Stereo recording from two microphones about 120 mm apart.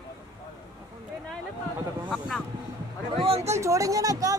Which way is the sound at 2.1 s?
Centre (ahead or behind).